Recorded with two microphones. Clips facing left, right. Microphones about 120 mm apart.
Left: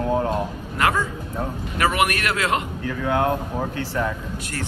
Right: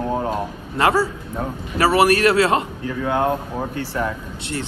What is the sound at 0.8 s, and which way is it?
A man's voice, 30° right (ahead or behind).